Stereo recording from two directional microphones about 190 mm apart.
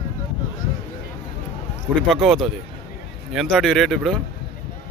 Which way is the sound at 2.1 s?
Centre (ahead or behind).